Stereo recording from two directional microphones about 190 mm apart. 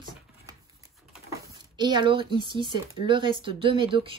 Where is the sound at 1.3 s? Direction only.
20° right (ahead or behind).